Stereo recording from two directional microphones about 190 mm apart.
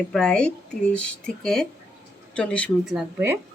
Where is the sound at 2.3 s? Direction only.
5° left (ahead or behind).